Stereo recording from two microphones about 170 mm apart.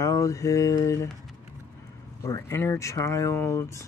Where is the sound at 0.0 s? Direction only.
20° left (ahead or behind).